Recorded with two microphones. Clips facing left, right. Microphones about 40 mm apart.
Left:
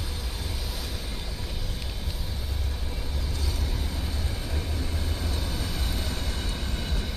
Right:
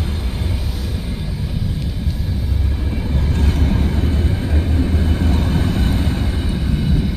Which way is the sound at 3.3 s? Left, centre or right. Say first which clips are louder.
Right 15 dB; right.